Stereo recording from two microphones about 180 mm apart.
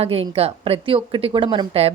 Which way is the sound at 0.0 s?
35° right (ahead or behind).